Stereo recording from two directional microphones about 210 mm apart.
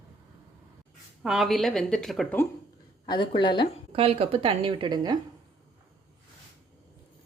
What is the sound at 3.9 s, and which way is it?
A woman's voice, 25° right (ahead or behind).